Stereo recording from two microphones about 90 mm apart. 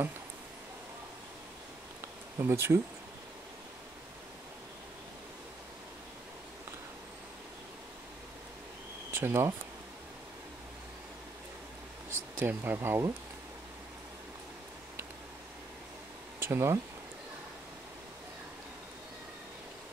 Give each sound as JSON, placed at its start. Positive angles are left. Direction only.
{"t": 2.3, "sound": "speech", "side_deg": -30}
{"t": 9.1, "sound": "speech", "side_deg": -25}
{"t": 12.4, "sound": "speech", "side_deg": -20}
{"t": 16.3, "sound": "speech", "side_deg": -25}